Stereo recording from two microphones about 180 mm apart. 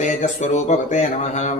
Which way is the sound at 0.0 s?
40° left (ahead or behind).